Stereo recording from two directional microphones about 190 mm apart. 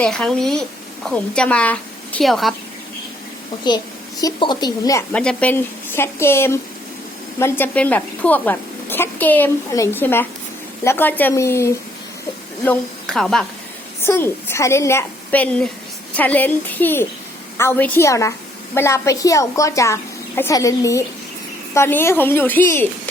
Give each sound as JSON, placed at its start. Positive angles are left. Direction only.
{"t": 0.0, "sound": "a woman's voice", "side_deg": 5}
{"t": 4.2, "sound": "a woman's voice", "side_deg": 20}
{"t": 5.1, "sound": "a woman's voice", "side_deg": 5}
{"t": 14.0, "sound": "a woman's voice", "side_deg": 10}